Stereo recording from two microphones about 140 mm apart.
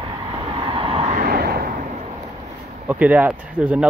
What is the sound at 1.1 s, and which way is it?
Vehicle, 90° right.